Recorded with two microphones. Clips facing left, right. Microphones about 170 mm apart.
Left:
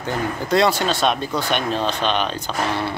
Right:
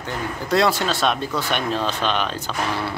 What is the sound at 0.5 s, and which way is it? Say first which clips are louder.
Speech: left 1 dB; centre (ahead or behind).